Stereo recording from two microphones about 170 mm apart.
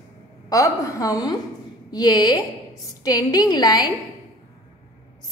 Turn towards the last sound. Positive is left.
turn(degrees=25)  # may be behind; listen again after turning